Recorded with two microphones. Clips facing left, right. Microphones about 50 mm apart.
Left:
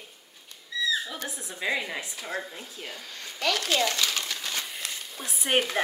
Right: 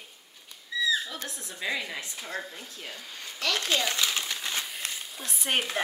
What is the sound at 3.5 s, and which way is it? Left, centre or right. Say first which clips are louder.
Crumpling: even; right.